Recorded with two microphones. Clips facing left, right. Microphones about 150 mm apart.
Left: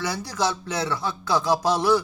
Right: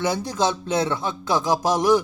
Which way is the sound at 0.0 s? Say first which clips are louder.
Right 4 dB; 20° right (ahead or behind).